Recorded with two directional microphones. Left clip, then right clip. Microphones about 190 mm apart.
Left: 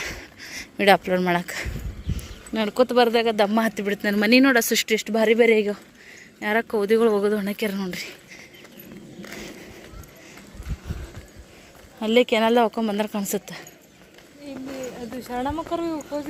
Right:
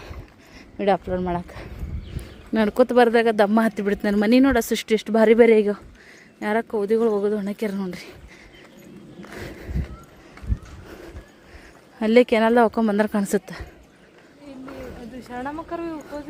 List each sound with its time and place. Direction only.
0.0 s dog: centre (ahead or behind)
2.5 s speech: 30° right (ahead or behind)
6.7 s a woman's voice: 10° right (ahead or behind)
11.9 s speech: 30° right (ahead or behind)
15.2 s speech: 40° left (ahead or behind)